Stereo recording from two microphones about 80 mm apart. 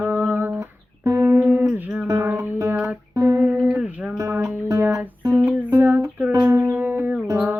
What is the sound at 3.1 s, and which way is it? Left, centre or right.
Guitar, right.